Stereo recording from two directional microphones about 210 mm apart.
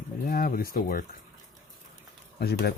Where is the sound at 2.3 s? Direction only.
50° left (ahead or behind).